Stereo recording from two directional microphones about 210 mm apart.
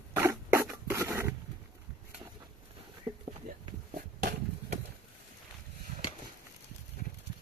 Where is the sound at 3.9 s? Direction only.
40° right (ahead or behind).